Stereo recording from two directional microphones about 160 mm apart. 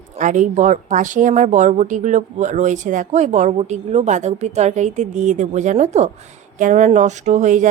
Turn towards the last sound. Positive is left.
turn(degrees=-50)  # may be behind; listen again after turning